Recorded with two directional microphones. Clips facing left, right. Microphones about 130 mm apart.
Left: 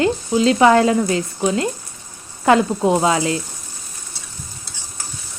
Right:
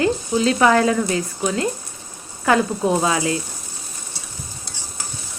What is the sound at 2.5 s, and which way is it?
Speech, 25° left (ahead or behind).